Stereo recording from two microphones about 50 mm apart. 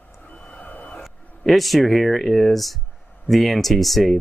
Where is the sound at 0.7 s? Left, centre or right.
Left.